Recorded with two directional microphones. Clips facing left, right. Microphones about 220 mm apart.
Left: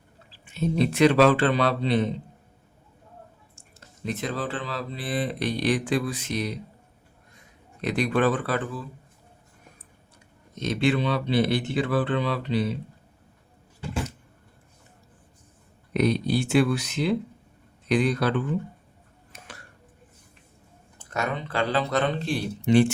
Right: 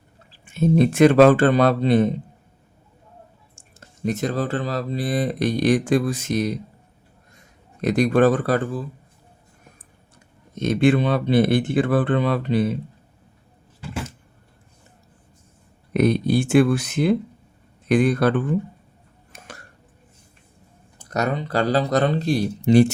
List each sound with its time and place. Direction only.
0.3 s speech: 50° right (ahead or behind)
3.5 s speech: 45° right (ahead or behind)
7.8 s speech: 45° right (ahead or behind)
10.5 s speech: 50° right (ahead or behind)
15.9 s speech: 50° right (ahead or behind)
21.0 s speech: 40° right (ahead or behind)